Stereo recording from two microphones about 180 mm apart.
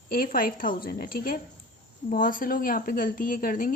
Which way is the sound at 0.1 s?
55° left (ahead or behind).